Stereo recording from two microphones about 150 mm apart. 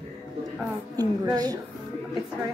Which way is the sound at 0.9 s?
25° right (ahead or behind).